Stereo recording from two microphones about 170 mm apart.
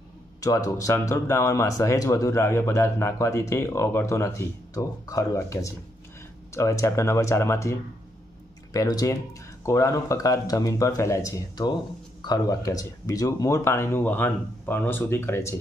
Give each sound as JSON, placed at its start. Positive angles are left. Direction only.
{"t": 0.4, "sound": "speech", "side_deg": 20}
{"t": 8.7, "sound": "speech", "side_deg": 20}